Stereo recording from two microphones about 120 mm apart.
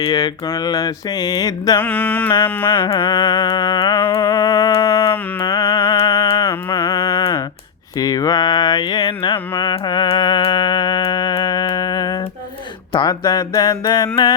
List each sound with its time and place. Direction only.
0.2 s mantra: 30° left (ahead or behind)
1.8 s music: 15° left (ahead or behind)
2.7 s humming: 45° left (ahead or behind)
4.8 s a sound: 35° left (ahead or behind)
5.4 s music: 40° left (ahead or behind)
6.5 s a sound: 20° left (ahead or behind)
7.9 s speech: 30° left (ahead or behind)
9.7 s a sound: 40° left (ahead or behind)
12.9 s speech: 45° left (ahead or behind)
13.2 s mantra: 30° left (ahead or behind)